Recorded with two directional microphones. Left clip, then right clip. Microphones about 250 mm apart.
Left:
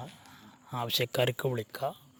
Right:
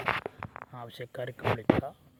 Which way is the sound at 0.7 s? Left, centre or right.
Left.